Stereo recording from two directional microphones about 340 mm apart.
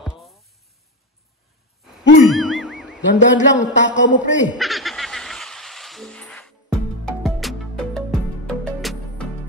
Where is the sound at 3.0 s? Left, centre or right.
Left.